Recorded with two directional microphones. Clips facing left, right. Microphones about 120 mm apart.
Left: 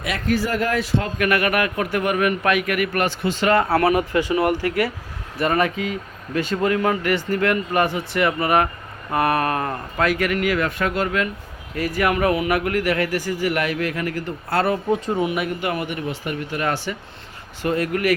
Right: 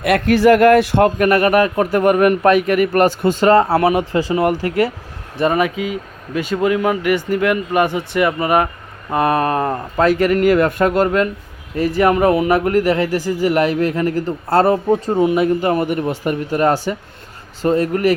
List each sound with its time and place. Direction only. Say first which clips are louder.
0.0 s speech: right 10 dB; 65° right (ahead or behind)
1.2 s speech: right 7 dB; 35° right (ahead or behind)
3.5 s speech: right 3 dB; 30° right (ahead or behind)
5.4 s speech: right 4 dB; 15° right (ahead or behind); by 11.3 s 40° right (ahead or behind)
11.8 s speech: right 6 dB; 25° right (ahead or behind)